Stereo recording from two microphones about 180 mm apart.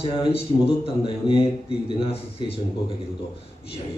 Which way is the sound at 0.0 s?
30° left (ahead or behind).